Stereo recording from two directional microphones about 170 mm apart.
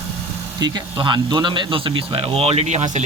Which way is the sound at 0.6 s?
25° right (ahead or behind).